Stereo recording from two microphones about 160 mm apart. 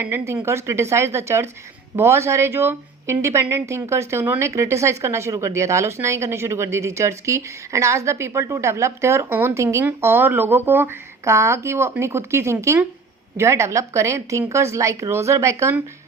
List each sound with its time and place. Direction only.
0.0 s a woman's voice: 15° right (ahead or behind)